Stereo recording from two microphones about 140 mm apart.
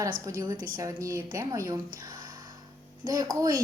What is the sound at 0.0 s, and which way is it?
Speech, 25° right (ahead or behind).